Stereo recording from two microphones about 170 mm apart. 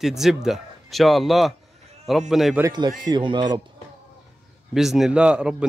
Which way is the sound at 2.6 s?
25° right (ahead or behind).